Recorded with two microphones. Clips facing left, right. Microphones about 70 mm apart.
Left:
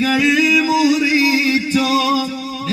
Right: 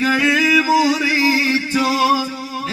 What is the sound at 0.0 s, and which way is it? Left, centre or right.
Music, right.